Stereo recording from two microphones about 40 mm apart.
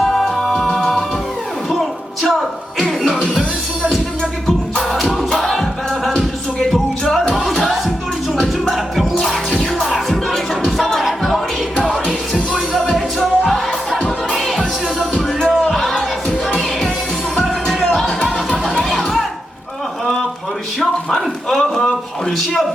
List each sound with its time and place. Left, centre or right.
0.0 s music: centre
0.3 s music: centre
5.3 s music: centre
8.7 s music: centre
11.8 s music: centre
13.1 s music: centre
15.1 s music: centre
15.7 s music: centre
17.3 s music: centre
18.9 s a sound: centre
20.7 s a sound: centre